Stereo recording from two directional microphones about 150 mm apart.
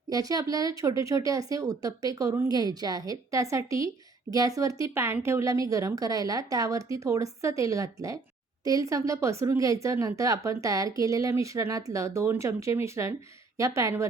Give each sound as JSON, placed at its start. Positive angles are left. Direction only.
{"t": 0.1, "sound": "speech", "side_deg": -25}